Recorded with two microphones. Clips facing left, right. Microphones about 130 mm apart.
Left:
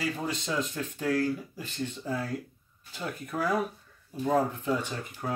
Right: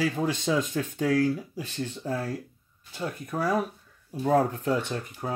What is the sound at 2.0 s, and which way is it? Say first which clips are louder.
Speech: right 3 dB; 40° right (ahead or behind).